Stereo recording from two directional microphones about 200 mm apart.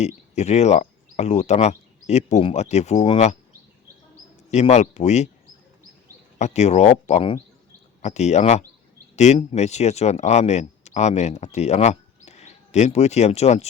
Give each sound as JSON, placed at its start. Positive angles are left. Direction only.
{"t": 0.0, "sound": "speech", "side_deg": 35}
{"t": 4.5, "sound": "speech", "side_deg": 35}
{"t": 6.4, "sound": "speech", "side_deg": 35}